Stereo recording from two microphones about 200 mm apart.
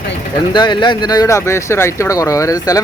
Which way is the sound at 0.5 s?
25° left (ahead or behind).